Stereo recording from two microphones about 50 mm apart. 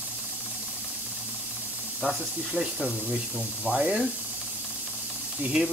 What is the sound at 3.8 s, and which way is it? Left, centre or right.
Speech, centre.